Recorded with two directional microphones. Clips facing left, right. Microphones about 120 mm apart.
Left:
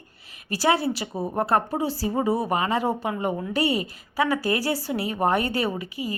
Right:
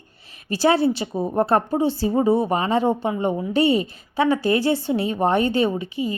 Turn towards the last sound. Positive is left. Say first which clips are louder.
# right 6 dB
turn(degrees=-25)  # may be behind; listen again after turning